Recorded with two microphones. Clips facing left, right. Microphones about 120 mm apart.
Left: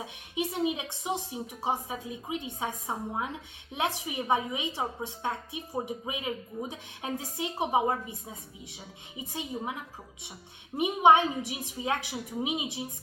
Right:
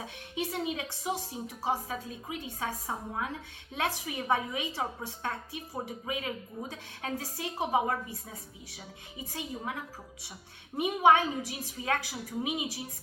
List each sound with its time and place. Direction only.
0.0 s a woman's voice: 15° left (ahead or behind)
10.8 s a woman's voice: 20° left (ahead or behind)